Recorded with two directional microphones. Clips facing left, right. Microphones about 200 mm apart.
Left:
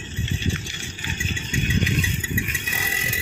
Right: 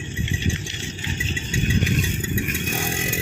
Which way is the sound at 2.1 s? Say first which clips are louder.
Right 3 dB; 45° right (ahead or behind).